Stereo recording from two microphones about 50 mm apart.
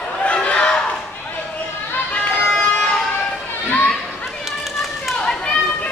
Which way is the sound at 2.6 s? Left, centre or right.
Left.